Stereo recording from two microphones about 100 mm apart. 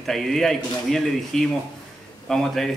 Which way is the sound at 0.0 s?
Centre (ahead or behind).